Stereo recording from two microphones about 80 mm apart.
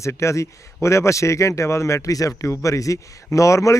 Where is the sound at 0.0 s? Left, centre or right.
Left.